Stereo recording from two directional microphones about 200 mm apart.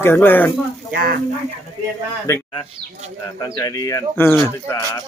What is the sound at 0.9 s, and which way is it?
Speech, 50° right (ahead or behind).